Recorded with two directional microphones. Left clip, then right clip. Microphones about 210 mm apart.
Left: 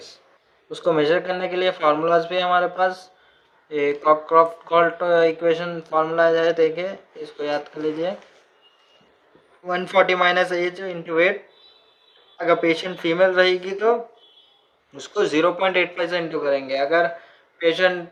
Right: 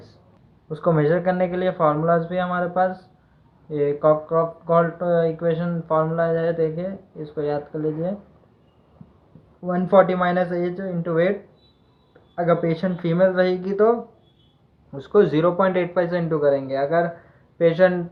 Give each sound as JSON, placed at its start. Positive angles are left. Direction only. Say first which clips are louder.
{"t": 0.7, "sound": "speech", "louder": "left 1 dB", "side_deg": 25}
{"t": 9.6, "sound": "speech", "louder": "right 2 dB", "side_deg": 30}
{"t": 12.5, "sound": "speech", "louder": "left 3 dB", "side_deg": 30}
{"t": 14.9, "sound": "speech", "louder": "right 3 dB", "side_deg": 20}